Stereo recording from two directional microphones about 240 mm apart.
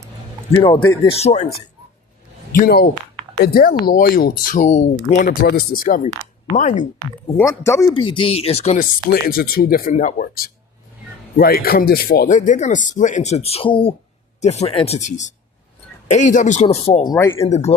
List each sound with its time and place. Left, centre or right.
0.9 s speech: left
2.6 s speech: left
7.3 s speech: centre
17.3 s speech: left